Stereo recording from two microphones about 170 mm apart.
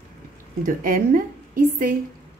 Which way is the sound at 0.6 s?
55° right (ahead or behind).